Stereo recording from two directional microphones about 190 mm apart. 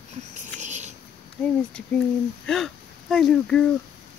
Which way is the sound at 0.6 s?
40° right (ahead or behind).